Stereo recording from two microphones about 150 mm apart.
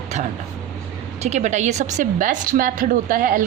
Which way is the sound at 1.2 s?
50° right (ahead or behind).